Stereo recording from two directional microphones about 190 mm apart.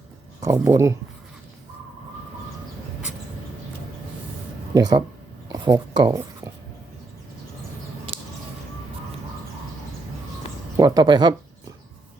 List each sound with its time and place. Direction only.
0.4 s speech: 15° right (ahead or behind)
4.7 s speech: 20° right (ahead or behind)
5.5 s a sound: 20° right (ahead or behind)
10.8 s speech: 20° right (ahead or behind)